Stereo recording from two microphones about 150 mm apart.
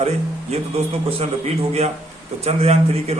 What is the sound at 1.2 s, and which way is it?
A man's voice, 45° right (ahead or behind).